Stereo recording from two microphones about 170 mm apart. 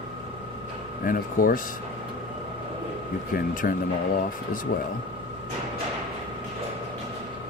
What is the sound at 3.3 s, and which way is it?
Speech, 55° left (ahead or behind).